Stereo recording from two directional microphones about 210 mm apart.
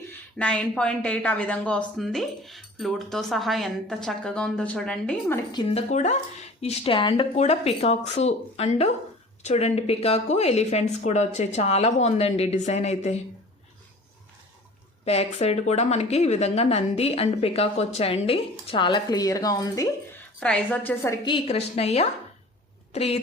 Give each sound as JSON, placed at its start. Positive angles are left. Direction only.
{"t": 0.3, "sound": "speech", "side_deg": 5}
{"t": 5.5, "sound": "a woman's voice", "side_deg": 20}
{"t": 5.9, "sound": "a woman's voice", "side_deg": 35}
{"t": 15.0, "sound": "a woman's voice", "side_deg": 30}
{"t": 20.4, "sound": "a woman's voice", "side_deg": 5}
{"t": 21.2, "sound": "a woman's voice", "side_deg": 25}